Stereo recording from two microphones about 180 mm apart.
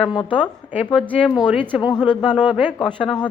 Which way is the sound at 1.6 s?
25° left (ahead or behind).